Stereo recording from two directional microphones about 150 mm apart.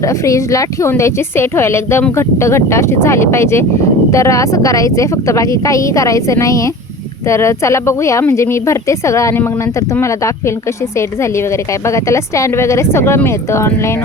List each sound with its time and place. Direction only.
0.0 s a woman's voice: 20° left (ahead or behind)